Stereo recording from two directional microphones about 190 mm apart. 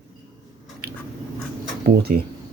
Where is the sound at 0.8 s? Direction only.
55° right (ahead or behind).